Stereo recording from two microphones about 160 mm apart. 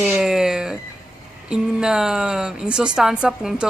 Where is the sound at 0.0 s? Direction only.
Centre (ahead or behind).